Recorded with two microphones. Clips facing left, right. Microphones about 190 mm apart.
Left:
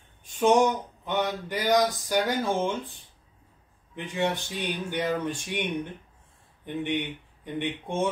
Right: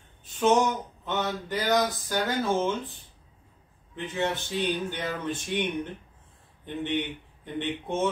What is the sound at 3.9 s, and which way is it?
Speech, 15° left (ahead or behind).